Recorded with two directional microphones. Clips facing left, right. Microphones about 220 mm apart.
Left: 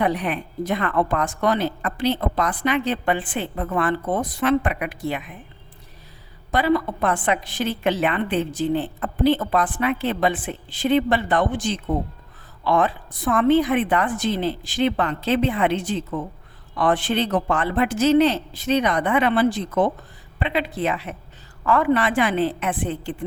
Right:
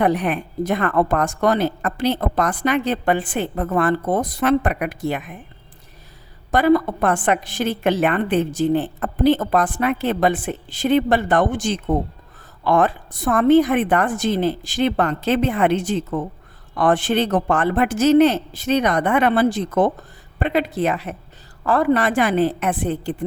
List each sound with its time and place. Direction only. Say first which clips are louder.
0.0 s a woman's voice: right 4 dB; 45° right (ahead or behind)
6.5 s a woman's voice: right 4 dB; 45° right (ahead or behind)